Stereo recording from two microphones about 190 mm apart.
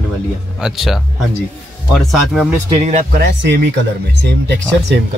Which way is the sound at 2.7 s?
35° right (ahead or behind).